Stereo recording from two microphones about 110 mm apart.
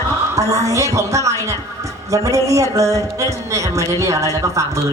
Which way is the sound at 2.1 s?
30° right (ahead or behind).